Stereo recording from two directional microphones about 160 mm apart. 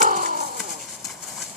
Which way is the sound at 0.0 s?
55° right (ahead or behind).